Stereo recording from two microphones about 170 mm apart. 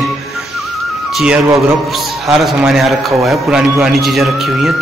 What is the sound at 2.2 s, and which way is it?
A man's voice, centre (ahead or behind).